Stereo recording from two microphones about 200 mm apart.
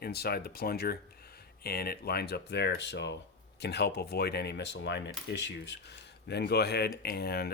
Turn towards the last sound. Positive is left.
turn(degrees=50)  # may be behind; listen again after turning